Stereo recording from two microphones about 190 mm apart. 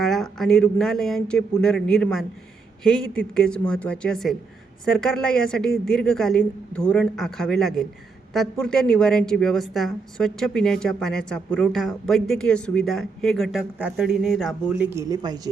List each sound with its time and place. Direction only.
0.0 s a woman's voice: centre (ahead or behind)
14.9 s a woman's voice: 20° right (ahead or behind)